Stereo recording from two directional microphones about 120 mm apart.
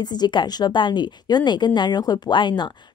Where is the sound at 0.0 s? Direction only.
35° left (ahead or behind).